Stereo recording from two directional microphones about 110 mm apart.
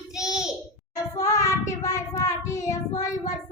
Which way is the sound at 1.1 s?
30° left (ahead or behind).